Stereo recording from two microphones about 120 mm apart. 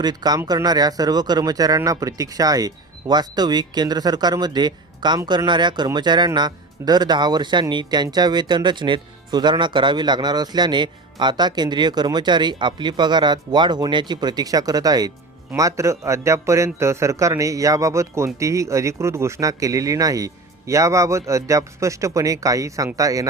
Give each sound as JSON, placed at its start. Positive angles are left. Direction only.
{"t": 0.0, "sound": "speech", "side_deg": -35}